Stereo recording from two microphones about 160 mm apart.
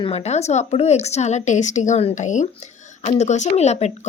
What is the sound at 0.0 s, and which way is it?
Speech, 40° left (ahead or behind).